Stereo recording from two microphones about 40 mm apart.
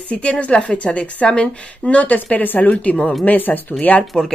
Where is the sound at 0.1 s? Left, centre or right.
Left.